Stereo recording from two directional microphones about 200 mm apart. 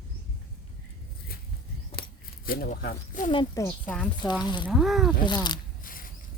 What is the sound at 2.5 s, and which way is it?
Speech, 45° left (ahead or behind).